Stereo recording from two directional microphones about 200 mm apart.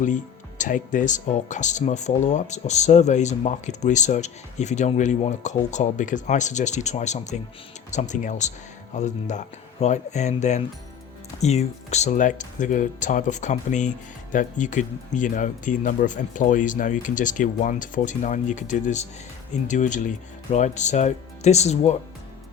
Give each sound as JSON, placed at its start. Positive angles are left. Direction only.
{"t": 0.6, "sound": "speech", "side_deg": 40}